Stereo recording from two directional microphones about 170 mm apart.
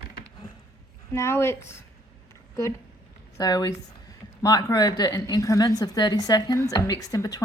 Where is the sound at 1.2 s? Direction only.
15° left (ahead or behind).